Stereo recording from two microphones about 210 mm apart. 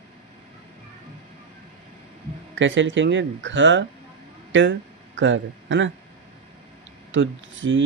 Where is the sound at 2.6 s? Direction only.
65° right (ahead or behind).